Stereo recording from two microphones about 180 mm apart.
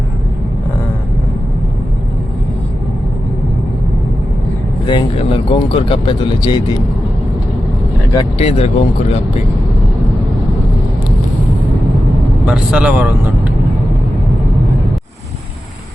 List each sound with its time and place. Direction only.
4.9 s speech: 25° left (ahead or behind)
8.4 s speech: 35° left (ahead or behind)
12.5 s speech: 5° right (ahead or behind)